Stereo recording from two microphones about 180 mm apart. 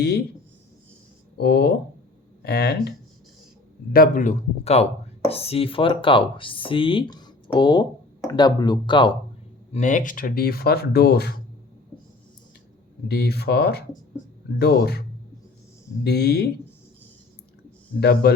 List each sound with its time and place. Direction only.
1.4 s speech: 65° left (ahead or behind)
3.9 s speech: 50° left (ahead or behind); by 9.1 s 25° left (ahead or behind)
9.7 s speech: 45° left (ahead or behind); by 11.3 s 60° left (ahead or behind)
13.1 s speech: 60° left (ahead or behind)
16.0 s speech: 60° left (ahead or behind)
18.0 s speech: 60° left (ahead or behind)